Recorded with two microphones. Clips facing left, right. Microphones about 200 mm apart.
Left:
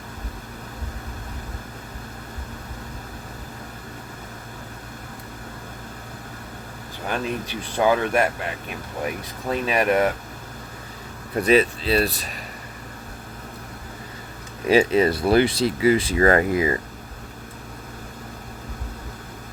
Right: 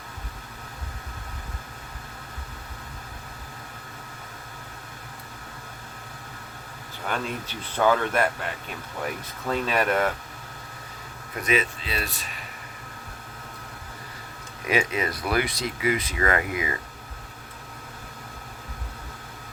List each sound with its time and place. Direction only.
7.1 s speech: 15° left (ahead or behind)
9.5 s speech: 15° left (ahead or behind)
11.3 s speech: 35° left (ahead or behind)
14.7 s speech: 30° left (ahead or behind)